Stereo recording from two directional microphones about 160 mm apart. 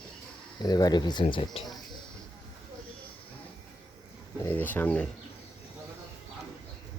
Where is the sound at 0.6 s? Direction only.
25° left (ahead or behind).